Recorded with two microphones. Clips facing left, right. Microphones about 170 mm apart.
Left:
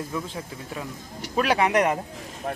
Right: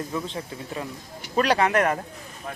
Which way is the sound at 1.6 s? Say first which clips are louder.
Even; 20° left (ahead or behind).